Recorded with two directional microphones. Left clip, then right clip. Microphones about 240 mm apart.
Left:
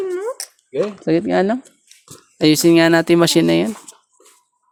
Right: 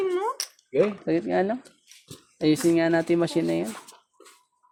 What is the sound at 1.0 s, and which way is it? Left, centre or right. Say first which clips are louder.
A woman's voice: left 8 dB; left.